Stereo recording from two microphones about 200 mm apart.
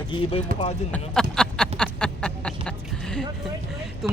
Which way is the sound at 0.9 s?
5° left (ahead or behind).